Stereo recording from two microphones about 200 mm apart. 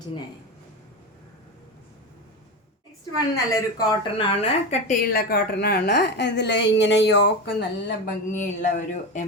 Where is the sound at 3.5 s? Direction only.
20° left (ahead or behind); by 7.6 s 60° left (ahead or behind).